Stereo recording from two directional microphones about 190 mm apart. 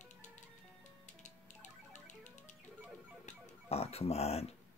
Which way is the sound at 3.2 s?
30° left (ahead or behind).